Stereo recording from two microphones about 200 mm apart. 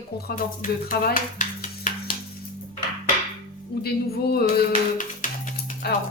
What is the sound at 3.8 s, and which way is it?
Speech, 50° left (ahead or behind).